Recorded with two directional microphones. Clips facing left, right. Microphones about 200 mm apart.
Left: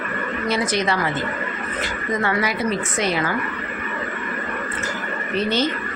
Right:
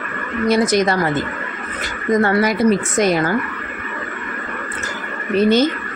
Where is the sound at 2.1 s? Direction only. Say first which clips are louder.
Right 8 dB; 40° right (ahead or behind).